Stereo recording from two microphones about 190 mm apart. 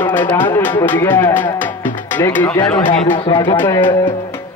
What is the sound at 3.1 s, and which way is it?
Speech, 25° left (ahead or behind).